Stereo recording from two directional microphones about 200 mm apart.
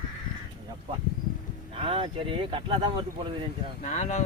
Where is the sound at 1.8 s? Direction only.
25° right (ahead or behind).